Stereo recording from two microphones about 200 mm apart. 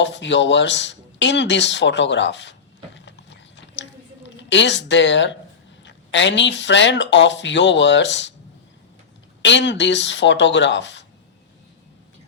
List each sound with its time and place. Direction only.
0.0 s speech: 65° left (ahead or behind)
3.8 s a sound: 65° left (ahead or behind)
5.8 s speech: 65° left (ahead or behind)
9.4 s speech: 65° left (ahead or behind)